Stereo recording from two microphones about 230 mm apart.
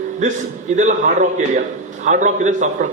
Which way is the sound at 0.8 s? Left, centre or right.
Right.